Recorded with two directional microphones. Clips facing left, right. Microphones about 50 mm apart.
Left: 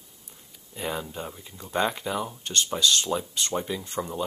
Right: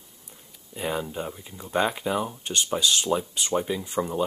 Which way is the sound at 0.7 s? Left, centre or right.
Centre.